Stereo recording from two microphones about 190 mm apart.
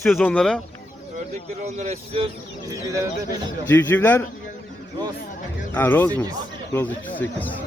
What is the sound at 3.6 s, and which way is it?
Speech, 10° left (ahead or behind).